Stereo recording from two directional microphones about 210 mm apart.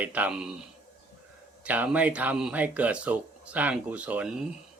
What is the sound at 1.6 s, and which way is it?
Speech, 5° right (ahead or behind).